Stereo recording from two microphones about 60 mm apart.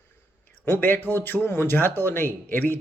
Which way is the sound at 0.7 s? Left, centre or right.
Left.